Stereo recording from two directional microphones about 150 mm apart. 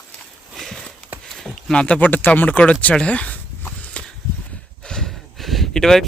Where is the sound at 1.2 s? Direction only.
5° left (ahead or behind).